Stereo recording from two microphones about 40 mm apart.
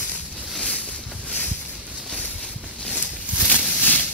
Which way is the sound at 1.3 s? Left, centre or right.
Left.